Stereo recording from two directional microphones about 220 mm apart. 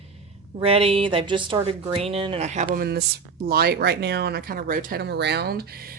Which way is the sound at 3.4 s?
45° right (ahead or behind).